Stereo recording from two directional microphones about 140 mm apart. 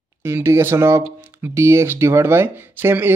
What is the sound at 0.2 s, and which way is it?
Speech, 15° right (ahead or behind).